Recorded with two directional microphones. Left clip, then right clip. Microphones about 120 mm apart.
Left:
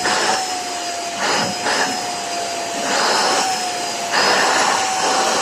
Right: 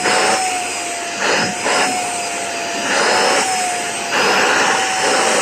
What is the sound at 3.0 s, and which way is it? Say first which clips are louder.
Vehicle: right 3 dB; 30° right (ahead or behind).